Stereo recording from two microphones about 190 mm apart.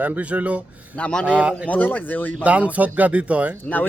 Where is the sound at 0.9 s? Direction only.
5° left (ahead or behind).